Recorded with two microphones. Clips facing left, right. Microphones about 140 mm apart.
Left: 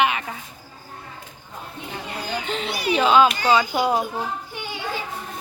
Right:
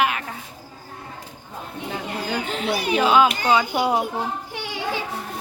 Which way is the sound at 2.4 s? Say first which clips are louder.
Even; 5° right (ahead or behind).